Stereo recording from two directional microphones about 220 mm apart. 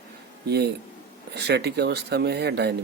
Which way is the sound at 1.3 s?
50° right (ahead or behind).